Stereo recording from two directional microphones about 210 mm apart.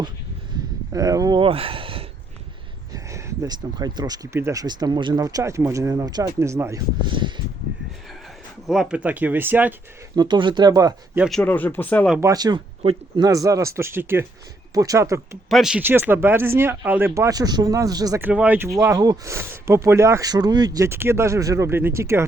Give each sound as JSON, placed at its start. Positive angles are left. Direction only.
{"t": 0.9, "sound": "speech", "side_deg": -15}
{"t": 2.9, "sound": "speech", "side_deg": -15}
{"t": 8.6, "sound": "speech", "side_deg": 0}
{"t": 10.2, "sound": "speech", "side_deg": -20}
{"t": 11.2, "sound": "speech", "side_deg": 0}
{"t": 12.1, "sound": "speech", "side_deg": -15}
{"t": 15.4, "sound": "speech", "side_deg": 0}